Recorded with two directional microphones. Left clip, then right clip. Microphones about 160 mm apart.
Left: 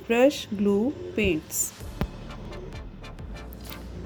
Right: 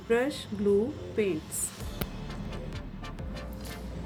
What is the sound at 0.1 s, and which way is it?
Speech, 45° left (ahead or behind).